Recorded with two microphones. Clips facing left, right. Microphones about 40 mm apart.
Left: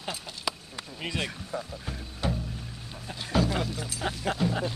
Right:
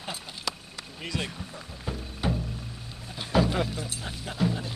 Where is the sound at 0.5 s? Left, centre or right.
Centre.